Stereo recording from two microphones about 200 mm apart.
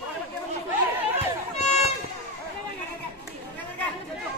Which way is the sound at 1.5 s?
35° left (ahead or behind).